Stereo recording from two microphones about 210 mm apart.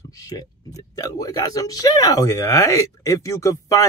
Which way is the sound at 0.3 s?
15° left (ahead or behind).